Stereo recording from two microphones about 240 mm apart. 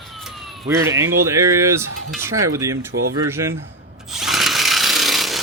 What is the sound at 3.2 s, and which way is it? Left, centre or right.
Speech, centre.